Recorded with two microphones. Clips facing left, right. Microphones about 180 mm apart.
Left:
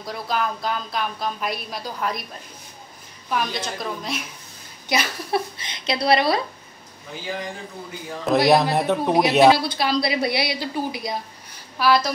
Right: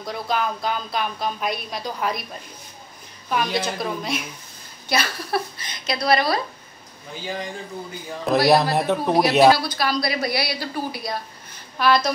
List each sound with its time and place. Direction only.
0.0 s a woman's voice: centre (ahead or behind)
3.3 s a woman's voice: centre (ahead or behind)
4.8 s a woman's voice: 15° left (ahead or behind)
8.3 s a woman's voice: centre (ahead or behind)
9.6 s a woman's voice: 25° left (ahead or behind)
11.8 s a woman's voice: 5° left (ahead or behind)